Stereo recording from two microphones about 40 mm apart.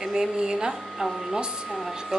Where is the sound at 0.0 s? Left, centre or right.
Centre.